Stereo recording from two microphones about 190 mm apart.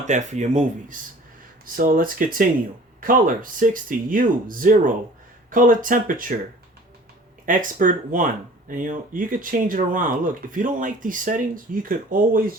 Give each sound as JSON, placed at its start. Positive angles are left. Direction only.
{"t": 0.0, "sound": "speech", "side_deg": -40}
{"t": 7.4, "sound": "speech", "side_deg": -45}